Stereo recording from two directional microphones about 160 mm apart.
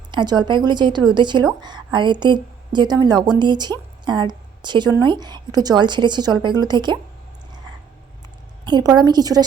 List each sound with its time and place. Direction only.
0.1 s a woman's voice: 30° right (ahead or behind)
8.6 s a woman's voice: 25° right (ahead or behind)